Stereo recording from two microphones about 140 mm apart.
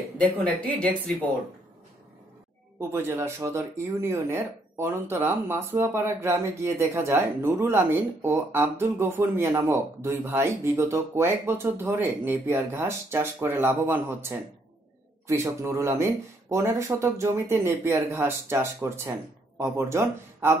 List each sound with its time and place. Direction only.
0.2 s speech: 10° left (ahead or behind)
2.9 s speech: 15° right (ahead or behind)
15.2 s speech: 20° right (ahead or behind)